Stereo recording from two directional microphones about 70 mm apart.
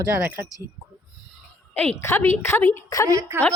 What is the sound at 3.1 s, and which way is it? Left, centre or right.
Speech, right.